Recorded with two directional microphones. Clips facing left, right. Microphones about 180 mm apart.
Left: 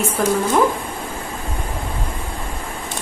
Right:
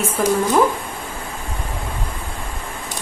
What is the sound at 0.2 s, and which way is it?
Speech, centre (ahead or behind).